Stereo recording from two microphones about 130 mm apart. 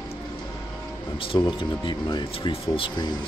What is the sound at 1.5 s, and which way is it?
Speech, 40° left (ahead or behind).